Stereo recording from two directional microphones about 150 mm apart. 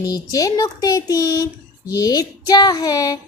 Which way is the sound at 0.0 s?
25° left (ahead or behind).